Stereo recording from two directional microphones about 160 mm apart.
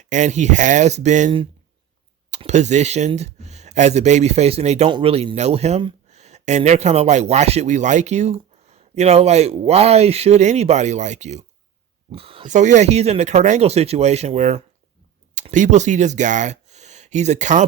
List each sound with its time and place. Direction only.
0.0 s speech: 50° right (ahead or behind)
2.4 s speech: 45° right (ahead or behind)
12.1 s speech: 35° right (ahead or behind)
12.5 s speech: 50° right (ahead or behind)